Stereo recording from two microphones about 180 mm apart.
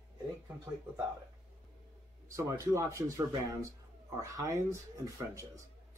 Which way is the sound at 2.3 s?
20° right (ahead or behind).